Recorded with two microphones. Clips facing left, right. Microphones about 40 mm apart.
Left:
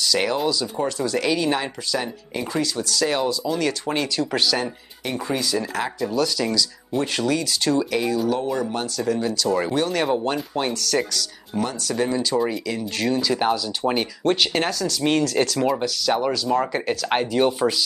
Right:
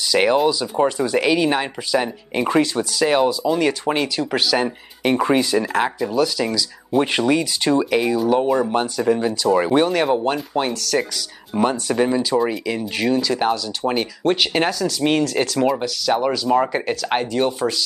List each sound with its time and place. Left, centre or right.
0.1 s speech: right
2.3 s speech: right
2.9 s speech: centre
5.0 s speech: right
5.9 s speech: centre
7.0 s speech: right
8.4 s speech: right; by 11.1 s centre
11.5 s speech: right
12.0 s speech: centre
13.1 s speech: centre
17.1 s speech: centre